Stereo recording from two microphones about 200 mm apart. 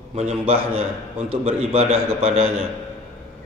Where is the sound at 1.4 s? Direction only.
30° right (ahead or behind).